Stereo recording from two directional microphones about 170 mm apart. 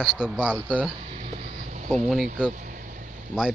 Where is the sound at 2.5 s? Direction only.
50° right (ahead or behind).